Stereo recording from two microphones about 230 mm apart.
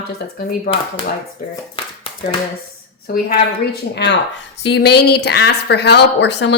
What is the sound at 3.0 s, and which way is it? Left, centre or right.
A woman's voice, left.